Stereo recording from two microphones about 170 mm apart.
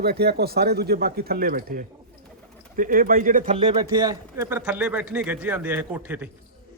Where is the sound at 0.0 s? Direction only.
70° right (ahead or behind); by 3.5 s 55° right (ahead or behind).